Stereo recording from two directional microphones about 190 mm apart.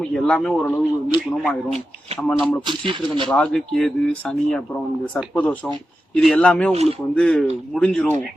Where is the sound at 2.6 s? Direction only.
25° right (ahead or behind).